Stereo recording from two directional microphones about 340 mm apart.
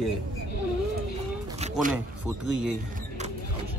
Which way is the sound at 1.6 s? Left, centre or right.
Right.